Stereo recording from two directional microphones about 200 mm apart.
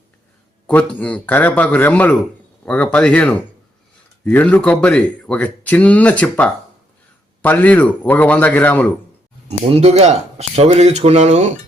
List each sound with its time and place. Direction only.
0.7 s speech: 5° left (ahead or behind)
9.5 s speech: 35° right (ahead or behind)